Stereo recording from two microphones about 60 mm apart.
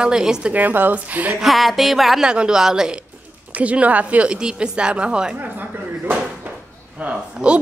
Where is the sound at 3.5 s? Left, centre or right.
Right.